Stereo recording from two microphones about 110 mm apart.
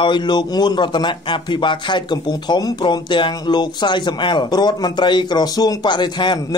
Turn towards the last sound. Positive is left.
turn(degrees=45)  # may be behind; listen again after turning